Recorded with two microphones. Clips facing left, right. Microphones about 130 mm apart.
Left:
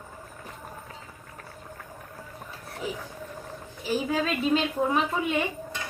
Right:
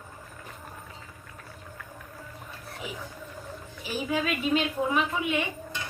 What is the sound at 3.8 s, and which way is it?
A woman's voice, 35° left (ahead or behind).